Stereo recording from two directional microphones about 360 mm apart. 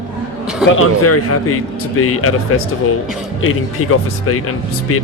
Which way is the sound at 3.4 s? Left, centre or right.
Left.